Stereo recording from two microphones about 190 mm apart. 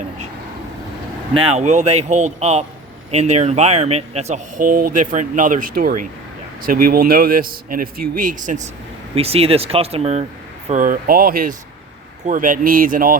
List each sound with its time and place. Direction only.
1.3 s a man's voice: 30° right (ahead or behind); by 13.1 s 50° right (ahead or behind)